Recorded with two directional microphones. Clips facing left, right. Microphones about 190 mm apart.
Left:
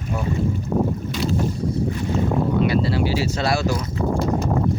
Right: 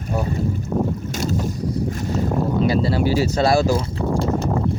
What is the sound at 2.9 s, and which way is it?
Speech, 40° right (ahead or behind).